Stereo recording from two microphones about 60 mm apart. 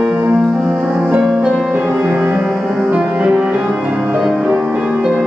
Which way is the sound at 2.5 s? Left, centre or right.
Centre.